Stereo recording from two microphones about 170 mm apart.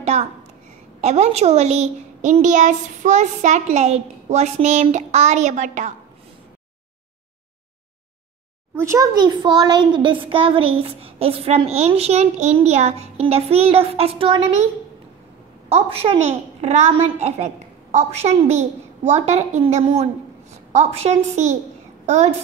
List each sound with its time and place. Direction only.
0.0 s a sound: 40° right (ahead or behind)
1.0 s a child's voice: 40° right (ahead or behind)
8.7 s a child's voice: 15° right (ahead or behind)
15.7 s a child's voice: 35° right (ahead or behind)
18.5 s a child's voice: 40° right (ahead or behind)